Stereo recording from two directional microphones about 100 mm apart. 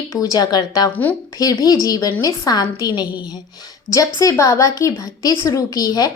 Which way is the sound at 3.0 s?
15° right (ahead or behind).